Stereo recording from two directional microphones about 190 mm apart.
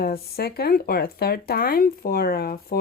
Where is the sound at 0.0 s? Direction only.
55° left (ahead or behind).